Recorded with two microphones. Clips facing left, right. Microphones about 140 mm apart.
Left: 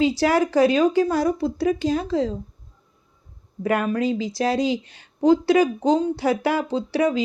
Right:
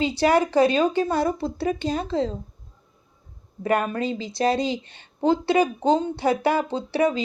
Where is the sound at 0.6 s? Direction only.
5° left (ahead or behind).